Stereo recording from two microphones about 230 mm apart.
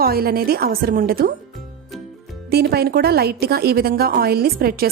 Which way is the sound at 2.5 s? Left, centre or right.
Right.